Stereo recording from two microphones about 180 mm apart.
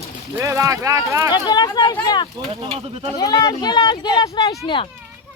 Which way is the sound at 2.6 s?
30° right (ahead or behind).